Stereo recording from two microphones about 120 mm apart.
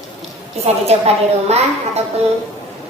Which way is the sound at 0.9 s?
60° right (ahead or behind).